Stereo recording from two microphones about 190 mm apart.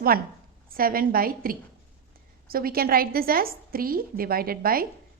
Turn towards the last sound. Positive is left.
turn(degrees=-50)  # may be behind; listen again after turning